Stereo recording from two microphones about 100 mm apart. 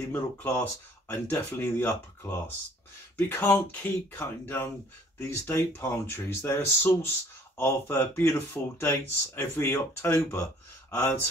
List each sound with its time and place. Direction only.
0.1 s speech: 20° left (ahead or behind)
3.2 s speech: 20° left (ahead or behind)